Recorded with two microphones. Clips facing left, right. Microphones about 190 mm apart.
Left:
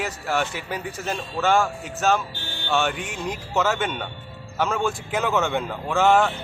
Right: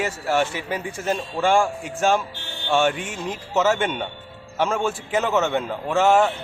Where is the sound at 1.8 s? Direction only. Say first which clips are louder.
Right 2 dB; 10° right (ahead or behind).